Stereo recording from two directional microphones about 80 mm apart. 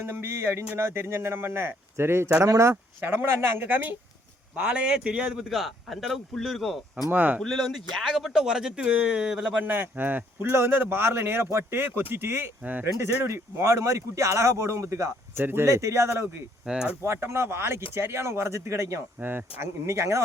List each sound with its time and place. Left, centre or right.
0.0 s speech: right
3.0 s speech: right
4.5 s a man's voice: centre
7.1 s speech: right
7.4 s speech: centre
9.6 s speech: right
16.6 s speech: centre
17.0 s speech: right